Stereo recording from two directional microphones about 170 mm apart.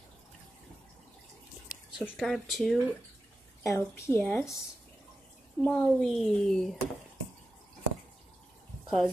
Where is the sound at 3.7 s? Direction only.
15° left (ahead or behind).